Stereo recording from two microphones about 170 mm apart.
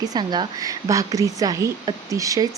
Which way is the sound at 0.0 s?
25° right (ahead or behind).